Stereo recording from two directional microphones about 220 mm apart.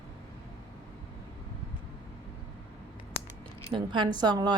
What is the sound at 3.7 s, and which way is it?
Speech, 20° right (ahead or behind).